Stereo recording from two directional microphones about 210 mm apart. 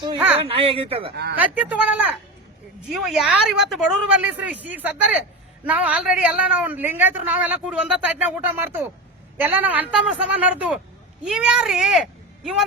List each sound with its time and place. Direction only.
0.3 s speech: 25° right (ahead or behind)
1.1 s speech: 50° right (ahead or behind)
1.4 s a woman's voice: 5° right (ahead or behind)